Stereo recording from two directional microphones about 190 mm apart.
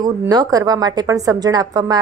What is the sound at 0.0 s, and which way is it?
Speech, 20° right (ahead or behind).